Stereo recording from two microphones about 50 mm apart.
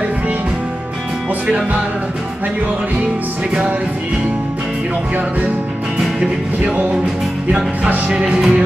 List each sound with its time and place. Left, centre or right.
5.9 s music: centre
8.1 s music: centre